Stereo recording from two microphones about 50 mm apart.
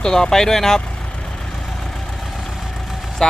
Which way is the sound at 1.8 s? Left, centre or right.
Centre.